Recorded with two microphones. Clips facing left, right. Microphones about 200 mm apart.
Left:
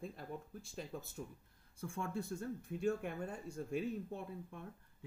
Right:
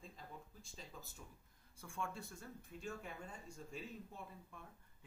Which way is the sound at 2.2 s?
60° left (ahead or behind).